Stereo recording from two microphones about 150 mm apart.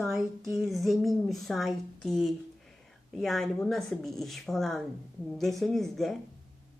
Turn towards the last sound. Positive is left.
turn(degrees=0)  # may be behind; listen again after turning